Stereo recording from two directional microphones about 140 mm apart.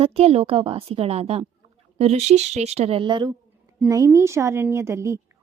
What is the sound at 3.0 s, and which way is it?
A woman's voice, 35° right (ahead or behind).